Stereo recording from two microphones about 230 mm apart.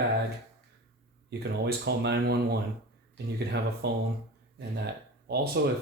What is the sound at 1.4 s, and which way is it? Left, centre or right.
Speech, right.